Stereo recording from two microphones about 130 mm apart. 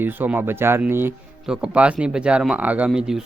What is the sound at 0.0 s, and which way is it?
Speech, 15° right (ahead or behind).